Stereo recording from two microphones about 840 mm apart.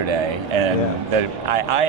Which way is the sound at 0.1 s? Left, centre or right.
Right.